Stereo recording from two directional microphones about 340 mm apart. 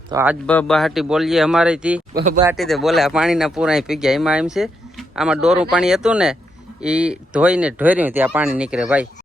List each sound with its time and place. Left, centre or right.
0.1 s speech: centre
2.1 s speech: right
2.4 s speech: centre